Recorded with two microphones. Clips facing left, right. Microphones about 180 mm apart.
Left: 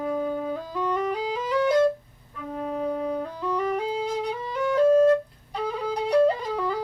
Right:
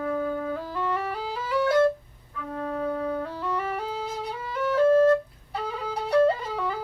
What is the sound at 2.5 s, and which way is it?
Music, 15° left (ahead or behind).